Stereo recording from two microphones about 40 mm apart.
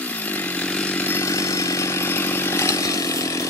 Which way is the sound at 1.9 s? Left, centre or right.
Left.